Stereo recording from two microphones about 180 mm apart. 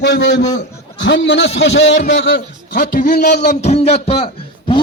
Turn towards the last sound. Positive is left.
turn(degrees=30)  # may be behind; listen again after turning